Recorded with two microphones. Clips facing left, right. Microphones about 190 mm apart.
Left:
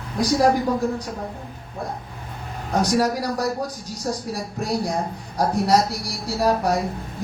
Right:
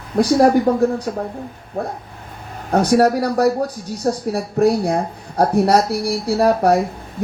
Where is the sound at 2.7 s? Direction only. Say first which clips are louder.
Right 6 dB; 60° right (ahead or behind).